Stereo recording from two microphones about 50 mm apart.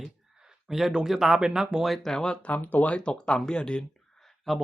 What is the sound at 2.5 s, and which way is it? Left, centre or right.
Speech, left.